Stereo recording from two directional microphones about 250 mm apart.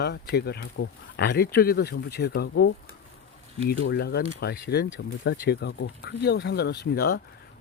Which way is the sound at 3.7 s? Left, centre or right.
Left.